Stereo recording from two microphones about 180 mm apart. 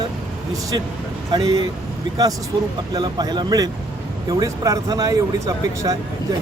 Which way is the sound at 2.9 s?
25° right (ahead or behind).